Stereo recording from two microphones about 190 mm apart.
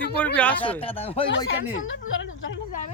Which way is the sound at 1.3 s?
90° left.